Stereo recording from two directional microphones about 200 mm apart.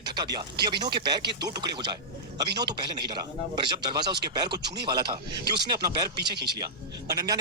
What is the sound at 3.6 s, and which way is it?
Speech, 20° right (ahead or behind).